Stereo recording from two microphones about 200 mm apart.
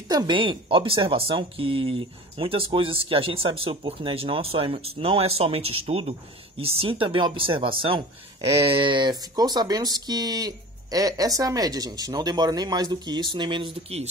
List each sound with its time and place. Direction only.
0.1 s speech: 20° right (ahead or behind)